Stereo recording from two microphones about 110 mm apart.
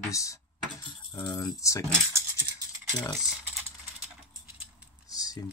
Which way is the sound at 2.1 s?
25° right (ahead or behind).